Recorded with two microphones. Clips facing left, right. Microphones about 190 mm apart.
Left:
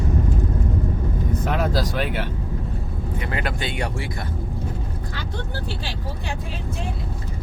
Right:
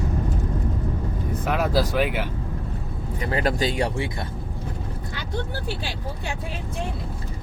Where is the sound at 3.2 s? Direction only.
35° right (ahead or behind).